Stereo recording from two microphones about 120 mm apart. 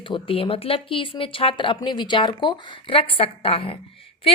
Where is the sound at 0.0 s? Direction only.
45° left (ahead or behind).